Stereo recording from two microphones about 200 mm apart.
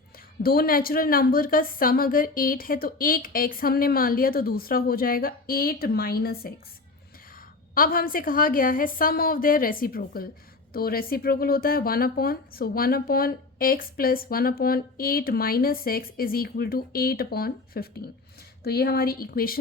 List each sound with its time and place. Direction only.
0.4 s speech: 50° left (ahead or behind)
7.8 s speech: 45° left (ahead or behind)